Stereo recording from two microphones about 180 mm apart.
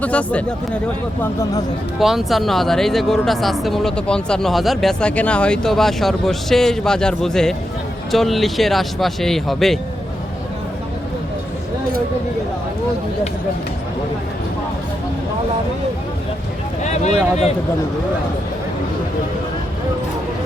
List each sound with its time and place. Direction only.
0.0 s speech: 10° left (ahead or behind)
2.0 s speech: centre (ahead or behind)
16.8 s speech: 40° left (ahead or behind)